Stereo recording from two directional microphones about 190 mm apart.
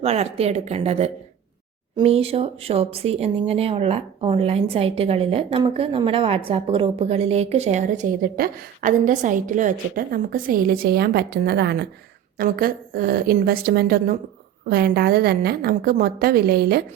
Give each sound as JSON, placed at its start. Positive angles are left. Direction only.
{"t": 0.0, "sound": "a woman's voice", "side_deg": -35}